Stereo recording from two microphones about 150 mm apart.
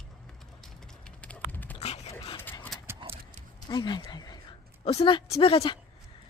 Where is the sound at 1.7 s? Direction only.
45° left (ahead or behind).